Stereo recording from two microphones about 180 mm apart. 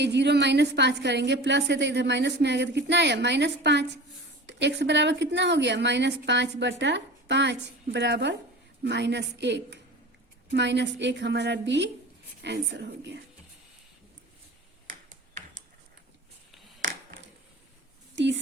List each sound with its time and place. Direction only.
0.0 s a woman's voice: 70° right (ahead or behind)
14.8 s ping: 45° right (ahead or behind)
18.1 s a sound: 80° right